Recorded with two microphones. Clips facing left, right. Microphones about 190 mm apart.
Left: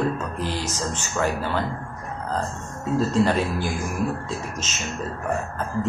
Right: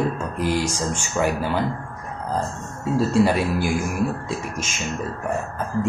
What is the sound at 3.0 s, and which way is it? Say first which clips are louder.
Speech: right 2 dB; 10° right (ahead or behind).